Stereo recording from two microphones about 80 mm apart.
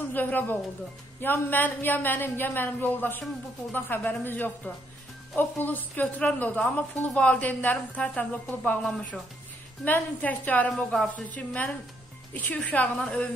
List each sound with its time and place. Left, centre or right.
0.1 s a woman's voice: left
8.8 s speech: centre
9.8 s a woman's voice: left